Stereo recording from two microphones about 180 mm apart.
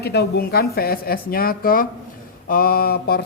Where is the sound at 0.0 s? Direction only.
65° left (ahead or behind).